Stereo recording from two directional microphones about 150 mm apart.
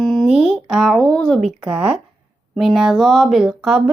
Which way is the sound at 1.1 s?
5° left (ahead or behind).